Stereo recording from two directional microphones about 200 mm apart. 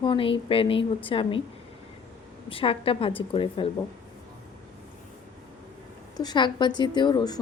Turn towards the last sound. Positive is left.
turn(degrees=20)  # may be behind; listen again after turning